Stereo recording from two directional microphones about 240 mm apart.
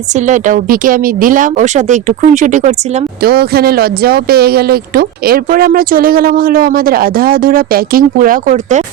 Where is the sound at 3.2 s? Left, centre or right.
Right.